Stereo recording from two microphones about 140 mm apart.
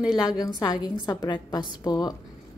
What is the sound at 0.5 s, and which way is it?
A woman's voice, 30° left (ahead or behind).